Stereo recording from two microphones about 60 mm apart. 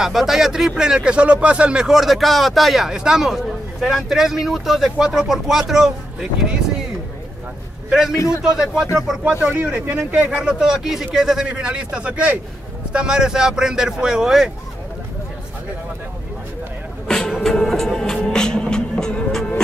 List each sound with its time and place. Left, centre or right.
0.0 s a man's voice: centre
1.9 s a man's voice: centre
7.9 s a man's voice: centre
9.4 s speech: right
10.3 s a man's voice: centre
17.3 s music: centre